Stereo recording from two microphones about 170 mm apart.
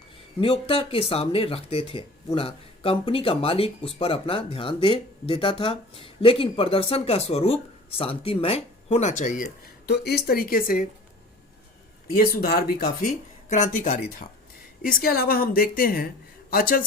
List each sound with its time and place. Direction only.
0.3 s speech: 30° left (ahead or behind); by 9.5 s 50° left (ahead or behind)
9.8 s a woman's voice: 75° left (ahead or behind); by 10.8 s 55° left (ahead or behind)
12.1 s a woman's voice: 60° left (ahead or behind)
13.5 s a woman's voice: 50° left (ahead or behind)